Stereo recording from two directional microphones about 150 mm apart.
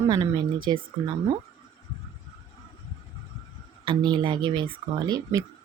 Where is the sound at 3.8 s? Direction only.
30° right (ahead or behind).